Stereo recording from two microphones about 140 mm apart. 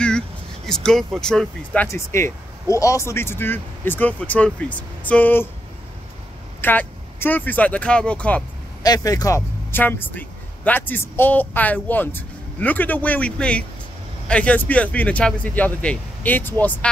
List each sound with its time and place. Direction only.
0.7 s speech: 5° left (ahead or behind)
1.9 s speech: 20° left (ahead or behind)
6.6 s speech: 15° left (ahead or behind)
8.8 s a man's voice: 25° left (ahead or behind); by 16.9 s 10° left (ahead or behind)